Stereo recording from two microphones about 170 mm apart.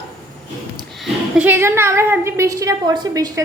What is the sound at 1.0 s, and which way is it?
A woman's voice, 10° right (ahead or behind).